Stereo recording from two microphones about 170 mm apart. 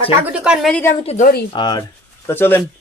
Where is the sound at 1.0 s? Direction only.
45° left (ahead or behind).